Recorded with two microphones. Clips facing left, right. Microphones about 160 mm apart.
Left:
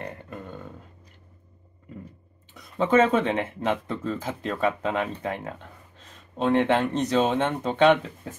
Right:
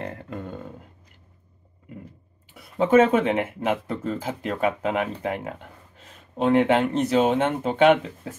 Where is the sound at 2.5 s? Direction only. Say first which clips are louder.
Right 3 dB; 10° right (ahead or behind).